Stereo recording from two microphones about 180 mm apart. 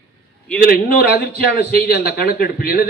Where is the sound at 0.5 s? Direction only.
55° left (ahead or behind).